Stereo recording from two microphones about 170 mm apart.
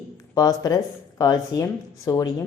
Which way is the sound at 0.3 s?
20° left (ahead or behind).